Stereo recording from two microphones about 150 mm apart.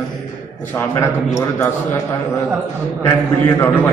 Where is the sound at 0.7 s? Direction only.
20° left (ahead or behind).